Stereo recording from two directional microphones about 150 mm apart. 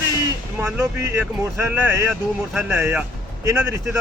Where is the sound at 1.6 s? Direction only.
10° right (ahead or behind).